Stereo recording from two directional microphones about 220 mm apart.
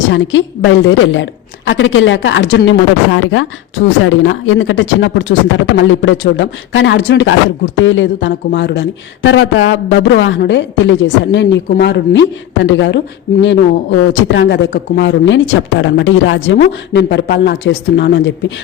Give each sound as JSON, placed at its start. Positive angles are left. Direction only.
{"t": 0.1, "sound": "speech", "side_deg": 60}
{"t": 14.1, "sound": "speech", "side_deg": 55}